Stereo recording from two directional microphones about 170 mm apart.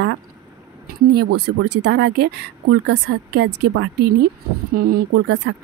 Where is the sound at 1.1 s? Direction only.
65° right (ahead or behind).